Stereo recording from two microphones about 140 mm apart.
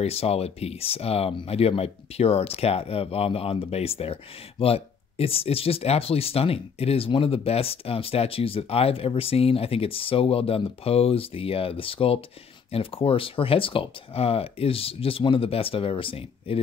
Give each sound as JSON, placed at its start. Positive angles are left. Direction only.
{"t": 0.0, "sound": "speech", "side_deg": 45}